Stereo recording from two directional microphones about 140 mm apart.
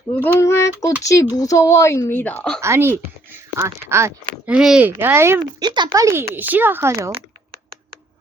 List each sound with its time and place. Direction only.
0.3 s speech: 20° left (ahead or behind)
2.6 s speech: 20° right (ahead or behind)
4.4 s speech: 5° right (ahead or behind)
5.6 s speech: 30° right (ahead or behind)
5.9 s speech: 20° right (ahead or behind)